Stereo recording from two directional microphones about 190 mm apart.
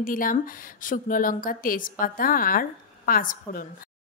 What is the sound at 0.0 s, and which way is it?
Speech, 45° left (ahead or behind).